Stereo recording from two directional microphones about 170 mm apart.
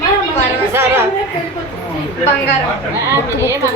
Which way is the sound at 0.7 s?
15° right (ahead or behind).